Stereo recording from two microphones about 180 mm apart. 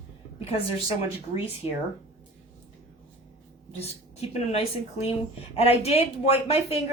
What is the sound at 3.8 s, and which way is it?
A woman's voice, 35° left (ahead or behind).